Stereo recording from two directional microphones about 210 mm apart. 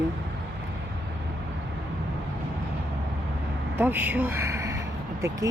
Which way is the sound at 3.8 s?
10° right (ahead or behind).